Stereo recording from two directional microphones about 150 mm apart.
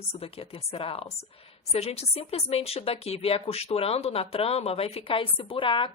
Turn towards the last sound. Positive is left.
turn(degrees=35)  # may be behind; listen again after turning